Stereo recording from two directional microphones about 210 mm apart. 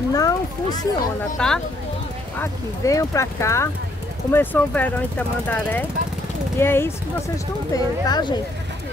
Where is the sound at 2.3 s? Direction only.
15° left (ahead or behind).